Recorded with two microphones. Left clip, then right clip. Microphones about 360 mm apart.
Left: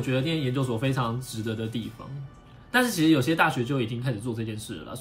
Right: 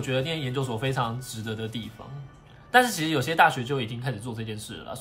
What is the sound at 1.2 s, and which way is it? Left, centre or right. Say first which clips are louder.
Speech: left 2 dB; right.